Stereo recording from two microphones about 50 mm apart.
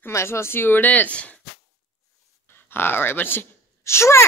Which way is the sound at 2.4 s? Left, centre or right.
Left.